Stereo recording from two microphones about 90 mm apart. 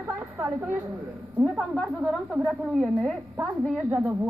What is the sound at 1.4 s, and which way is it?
A woman's voice, centre (ahead or behind).